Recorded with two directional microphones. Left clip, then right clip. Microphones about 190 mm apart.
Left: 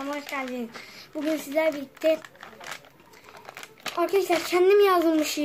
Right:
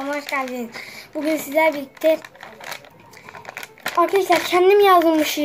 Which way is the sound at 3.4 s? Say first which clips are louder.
Right 7 dB; 5° right (ahead or behind).